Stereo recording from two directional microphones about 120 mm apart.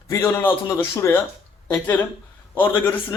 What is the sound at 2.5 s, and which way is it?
Speech, 15° left (ahead or behind).